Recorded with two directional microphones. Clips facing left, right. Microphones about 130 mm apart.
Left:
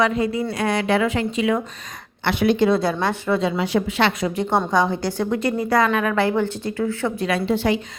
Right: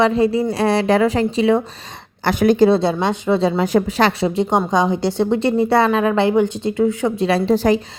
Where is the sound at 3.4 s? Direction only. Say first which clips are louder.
Right 5 dB; 40° right (ahead or behind).